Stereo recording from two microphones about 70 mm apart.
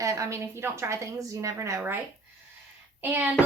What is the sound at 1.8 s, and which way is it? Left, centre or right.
Speech, right.